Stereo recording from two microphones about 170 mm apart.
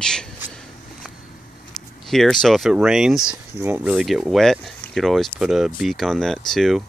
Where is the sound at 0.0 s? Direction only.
5° left (ahead or behind).